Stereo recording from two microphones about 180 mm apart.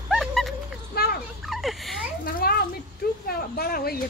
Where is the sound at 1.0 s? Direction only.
60° left (ahead or behind).